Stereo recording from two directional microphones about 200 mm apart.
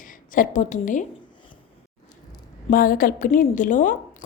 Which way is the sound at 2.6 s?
45° left (ahead or behind).